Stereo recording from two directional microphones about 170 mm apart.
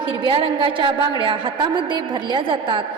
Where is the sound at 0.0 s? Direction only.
30° right (ahead or behind).